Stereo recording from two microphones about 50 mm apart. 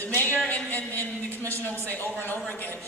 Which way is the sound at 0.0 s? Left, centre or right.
Left.